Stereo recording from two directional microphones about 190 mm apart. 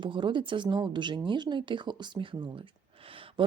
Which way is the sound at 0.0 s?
25° right (ahead or behind).